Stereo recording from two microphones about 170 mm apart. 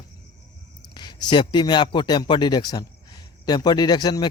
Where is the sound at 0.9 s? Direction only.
25° left (ahead or behind).